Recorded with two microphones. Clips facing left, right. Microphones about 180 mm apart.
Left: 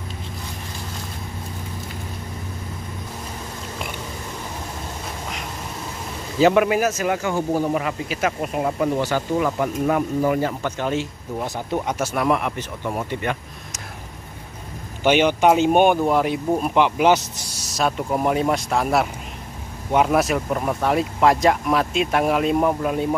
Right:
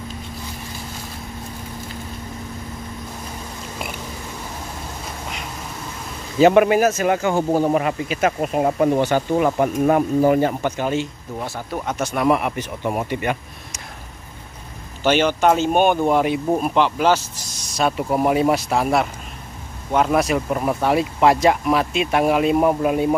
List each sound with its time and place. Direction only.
6.6 s speech: 35° right (ahead or behind)
9.0 s speech: 20° right (ahead or behind)
9.6 s speech: 35° right (ahead or behind)
10.8 s speech: centre (ahead or behind)
11.4 s speech: 20° left (ahead or behind)
12.3 s speech: 5° right (ahead or behind)
15.0 s speech: 15° left (ahead or behind)
16.0 s speech: centre (ahead or behind)
16.7 s speech: 15° left (ahead or behind)
17.7 s speech: 5° right (ahead or behind)